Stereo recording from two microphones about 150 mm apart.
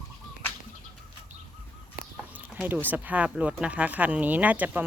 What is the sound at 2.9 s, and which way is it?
Speech, 10° right (ahead or behind).